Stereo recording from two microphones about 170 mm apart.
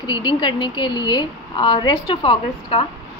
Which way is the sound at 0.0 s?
25° left (ahead or behind).